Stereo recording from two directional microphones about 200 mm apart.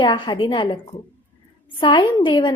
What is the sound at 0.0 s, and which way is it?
Speech, 20° left (ahead or behind).